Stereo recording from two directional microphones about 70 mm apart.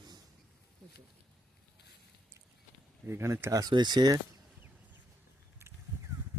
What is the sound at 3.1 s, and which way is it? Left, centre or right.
Speech, right.